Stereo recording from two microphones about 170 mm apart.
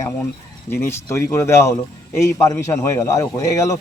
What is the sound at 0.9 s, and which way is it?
Speech, 15° left (ahead or behind).